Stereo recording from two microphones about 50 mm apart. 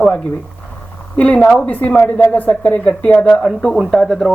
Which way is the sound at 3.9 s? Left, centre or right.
Centre.